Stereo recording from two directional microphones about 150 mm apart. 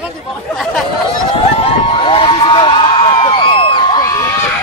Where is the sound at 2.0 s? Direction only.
35° left (ahead or behind).